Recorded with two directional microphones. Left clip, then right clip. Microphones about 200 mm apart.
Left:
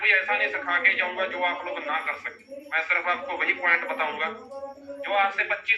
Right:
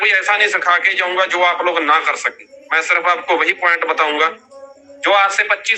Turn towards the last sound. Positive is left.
turn(degrees=-50)  # may be behind; listen again after turning